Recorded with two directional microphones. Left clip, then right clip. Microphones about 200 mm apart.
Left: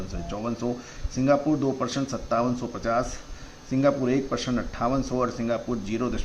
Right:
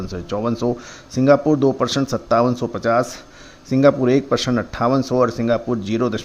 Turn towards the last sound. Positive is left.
turn(degrees=-45)  # may be behind; listen again after turning